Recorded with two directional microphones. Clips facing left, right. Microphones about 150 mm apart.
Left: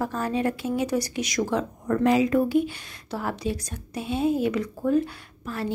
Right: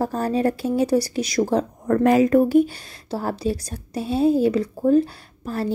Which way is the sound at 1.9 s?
50° right (ahead or behind).